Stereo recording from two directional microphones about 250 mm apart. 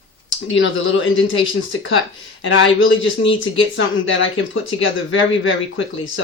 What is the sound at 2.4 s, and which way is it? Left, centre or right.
Speech, left.